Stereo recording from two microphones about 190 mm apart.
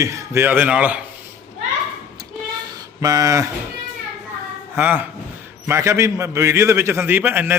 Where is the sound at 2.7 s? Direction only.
20° right (ahead or behind).